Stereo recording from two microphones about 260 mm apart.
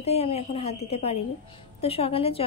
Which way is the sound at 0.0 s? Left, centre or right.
Left.